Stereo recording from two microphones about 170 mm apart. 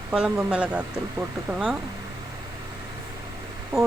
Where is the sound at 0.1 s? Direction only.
5° right (ahead or behind).